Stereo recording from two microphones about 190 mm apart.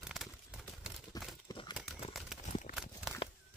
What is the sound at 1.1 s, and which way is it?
Crumpling, 20° left (ahead or behind).